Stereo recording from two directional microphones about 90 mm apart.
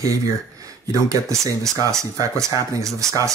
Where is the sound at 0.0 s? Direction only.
40° right (ahead or behind).